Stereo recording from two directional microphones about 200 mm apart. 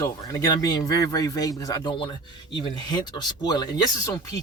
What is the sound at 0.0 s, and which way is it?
Speech, 15° left (ahead or behind).